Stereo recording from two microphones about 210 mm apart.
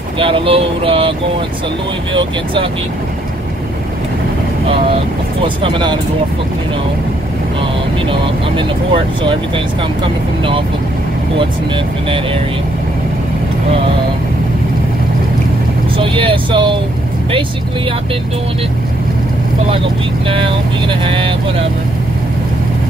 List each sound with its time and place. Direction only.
0.2 s speech: 25° right (ahead or behind)
2.1 s speech: 25° right (ahead or behind)
5.6 s speech: 25° right (ahead or behind)
8.1 s speech: 25° right (ahead or behind)
11.3 s speech: 25° right (ahead or behind)
16.0 s speech: 25° right (ahead or behind)
20.2 s speech: 25° right (ahead or behind)